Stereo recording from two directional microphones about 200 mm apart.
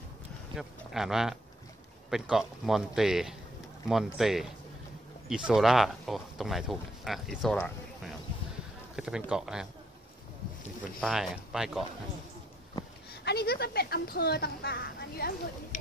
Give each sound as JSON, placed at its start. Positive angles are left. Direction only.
{"t": 0.6, "sound": "speech", "side_deg": 0}
{"t": 8.9, "sound": "speech", "side_deg": -5}
{"t": 11.0, "sound": "speech", "side_deg": 0}
{"t": 13.1, "sound": "a woman's voice", "side_deg": 55}